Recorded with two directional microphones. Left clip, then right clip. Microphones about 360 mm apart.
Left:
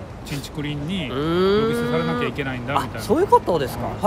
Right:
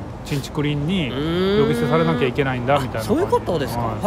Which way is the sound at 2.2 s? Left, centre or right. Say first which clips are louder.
Right 5 dB; centre.